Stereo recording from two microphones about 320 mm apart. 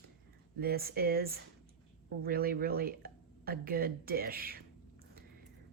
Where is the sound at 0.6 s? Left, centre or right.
Right.